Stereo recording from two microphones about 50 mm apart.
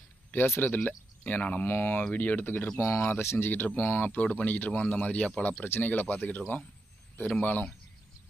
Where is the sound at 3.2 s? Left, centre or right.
Left.